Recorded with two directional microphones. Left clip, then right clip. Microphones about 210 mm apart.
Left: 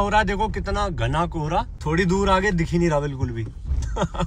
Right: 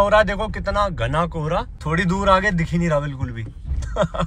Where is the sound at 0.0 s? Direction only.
5° left (ahead or behind).